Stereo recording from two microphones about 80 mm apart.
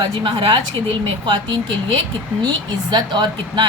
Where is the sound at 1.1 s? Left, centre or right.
Right.